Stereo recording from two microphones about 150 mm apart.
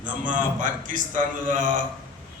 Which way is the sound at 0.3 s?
60° right (ahead or behind).